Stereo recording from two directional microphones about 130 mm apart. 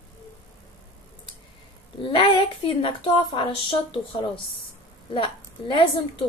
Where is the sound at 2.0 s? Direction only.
40° left (ahead or behind).